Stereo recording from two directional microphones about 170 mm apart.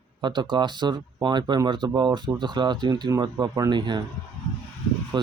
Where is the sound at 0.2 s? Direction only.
25° right (ahead or behind).